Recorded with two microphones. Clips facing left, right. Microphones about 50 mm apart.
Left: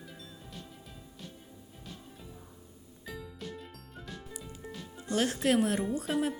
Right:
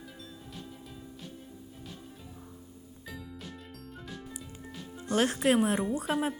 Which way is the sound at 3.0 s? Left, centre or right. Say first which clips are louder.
Left 2 dB; centre.